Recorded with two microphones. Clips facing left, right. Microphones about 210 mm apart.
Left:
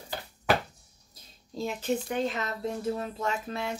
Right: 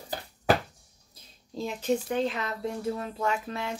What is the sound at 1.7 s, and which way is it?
Speech, 5° left (ahead or behind).